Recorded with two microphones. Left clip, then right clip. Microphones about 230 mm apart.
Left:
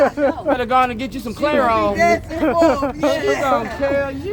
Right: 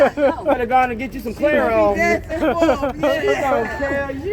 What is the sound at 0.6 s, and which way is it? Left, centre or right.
Speech, left.